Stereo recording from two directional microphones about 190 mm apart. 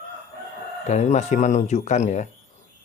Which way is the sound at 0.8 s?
40° left (ahead or behind).